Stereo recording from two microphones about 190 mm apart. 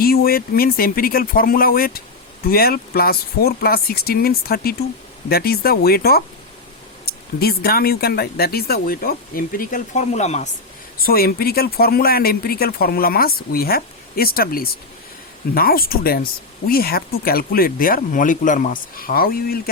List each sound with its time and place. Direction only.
0.0 s speech: 50° left (ahead or behind); by 10.5 s 35° left (ahead or behind)
11.0 s speech: 50° left (ahead or behind)